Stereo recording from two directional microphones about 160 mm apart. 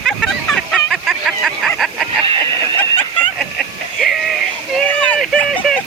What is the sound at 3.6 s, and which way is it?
Music, centre (ahead or behind).